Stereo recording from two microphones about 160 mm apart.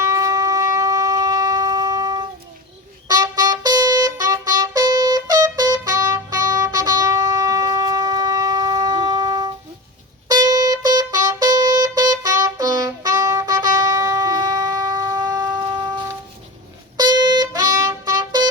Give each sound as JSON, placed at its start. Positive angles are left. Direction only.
{"t": 0.0, "sound": "shofar", "side_deg": -20}
{"t": 3.1, "sound": "music", "side_deg": -25}